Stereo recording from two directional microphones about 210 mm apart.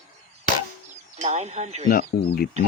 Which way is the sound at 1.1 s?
30° right (ahead or behind).